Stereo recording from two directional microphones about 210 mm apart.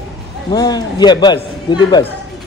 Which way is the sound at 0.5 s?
20° left (ahead or behind).